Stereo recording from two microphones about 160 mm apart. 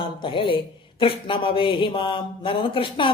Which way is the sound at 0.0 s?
30° left (ahead or behind).